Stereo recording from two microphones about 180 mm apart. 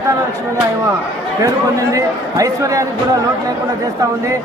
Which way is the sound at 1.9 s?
20° right (ahead or behind).